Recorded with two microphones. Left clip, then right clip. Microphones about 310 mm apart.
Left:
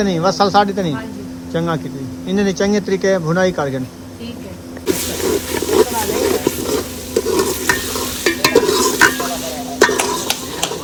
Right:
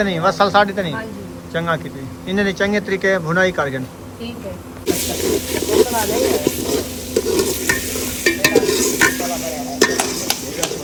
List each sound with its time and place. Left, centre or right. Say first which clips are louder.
0.0 s speech: left 1 dB; centre
4.9 s snake: left 1 dB; centre